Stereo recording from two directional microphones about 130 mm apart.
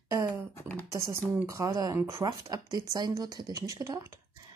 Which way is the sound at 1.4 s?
25° right (ahead or behind).